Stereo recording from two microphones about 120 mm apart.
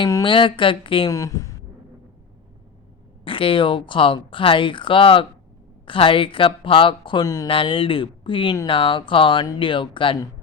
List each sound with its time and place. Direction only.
0.3 s speech: 45° left (ahead or behind)
1.1 s a sound: 30° left (ahead or behind)
3.2 s speech: 45° left (ahead or behind)